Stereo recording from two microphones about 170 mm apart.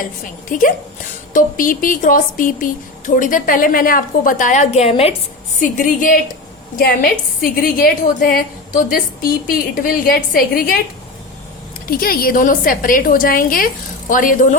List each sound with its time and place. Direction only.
0.5 s a woman's voice: 55° left (ahead or behind); by 5.1 s 35° left (ahead or behind)
5.5 s a woman's voice: 50° left (ahead or behind)
6.7 s a woman's voice: 60° left (ahead or behind)
11.9 s a woman's voice: 60° left (ahead or behind)